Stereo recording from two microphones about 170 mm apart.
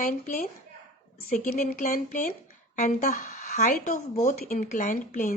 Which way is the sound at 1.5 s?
55° left (ahead or behind).